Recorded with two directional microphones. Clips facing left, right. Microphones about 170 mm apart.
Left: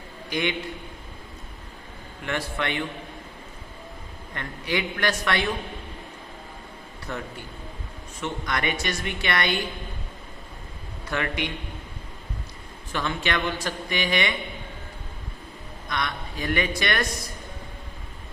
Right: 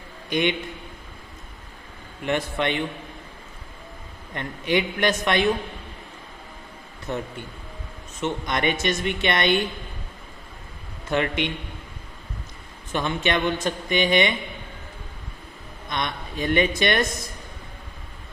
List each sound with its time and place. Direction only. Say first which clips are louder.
0.3 s a man's voice: right 4 dB; 20° right (ahead or behind)
2.2 s a woman's voice: right 4 dB; 20° right (ahead or behind)
4.4 s a woman's voice: right 5 dB; 20° right (ahead or behind)
7.1 s a woman's voice: right 4 dB; 20° right (ahead or behind)
11.1 s a woman's voice: right 5 dB; 20° right (ahead or behind)
12.9 s a woman's voice: right 3 dB; 20° right (ahead or behind)
15.9 s a woman's voice: right 1 dB; 20° right (ahead or behind)